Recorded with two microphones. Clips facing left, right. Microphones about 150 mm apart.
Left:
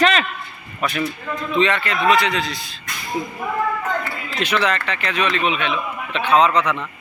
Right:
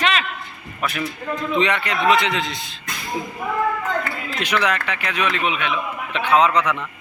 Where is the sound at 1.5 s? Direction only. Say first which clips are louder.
Left 2 dB; 15° right (ahead or behind).